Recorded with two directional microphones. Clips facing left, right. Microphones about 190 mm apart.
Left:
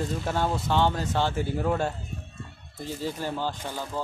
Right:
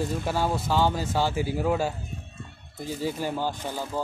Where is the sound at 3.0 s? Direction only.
10° right (ahead or behind).